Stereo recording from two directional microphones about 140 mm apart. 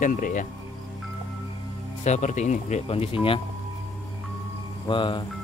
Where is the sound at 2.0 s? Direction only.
55° left (ahead or behind); by 3.4 s 40° left (ahead or behind).